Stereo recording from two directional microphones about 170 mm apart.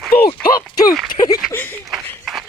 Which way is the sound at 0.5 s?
20° left (ahead or behind).